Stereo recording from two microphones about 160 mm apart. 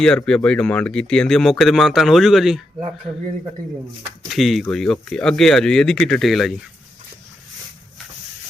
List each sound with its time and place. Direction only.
0.3 s speech: 5° left (ahead or behind)
4.3 s speech: centre (ahead or behind)